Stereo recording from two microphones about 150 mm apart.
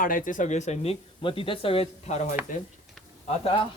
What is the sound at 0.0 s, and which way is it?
Speech, 65° left (ahead or behind).